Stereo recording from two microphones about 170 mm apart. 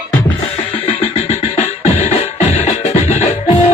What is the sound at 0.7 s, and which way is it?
Music, 35° left (ahead or behind).